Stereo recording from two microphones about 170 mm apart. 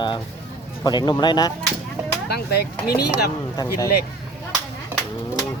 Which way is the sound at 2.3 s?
70° left (ahead or behind).